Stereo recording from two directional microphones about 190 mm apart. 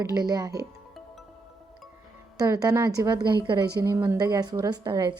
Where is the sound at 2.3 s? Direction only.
20° right (ahead or behind).